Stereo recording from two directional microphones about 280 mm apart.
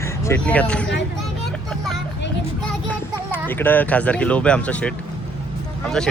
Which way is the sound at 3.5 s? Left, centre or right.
Centre.